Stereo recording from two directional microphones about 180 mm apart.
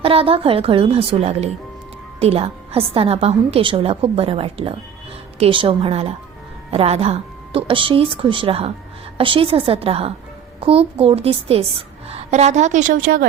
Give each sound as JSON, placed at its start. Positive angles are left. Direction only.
{"t": 0.0, "sound": "a woman's voice", "side_deg": -30}